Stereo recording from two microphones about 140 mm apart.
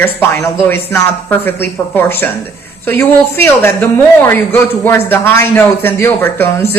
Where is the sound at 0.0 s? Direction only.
15° left (ahead or behind).